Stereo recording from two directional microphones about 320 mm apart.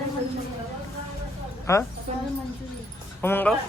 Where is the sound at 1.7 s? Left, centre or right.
Centre.